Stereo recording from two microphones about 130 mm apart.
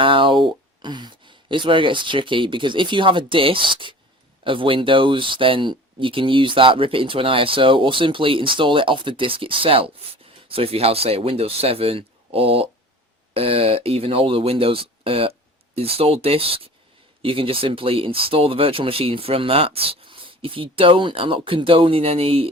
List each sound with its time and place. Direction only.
0.0 s speech: 40° right (ahead or behind)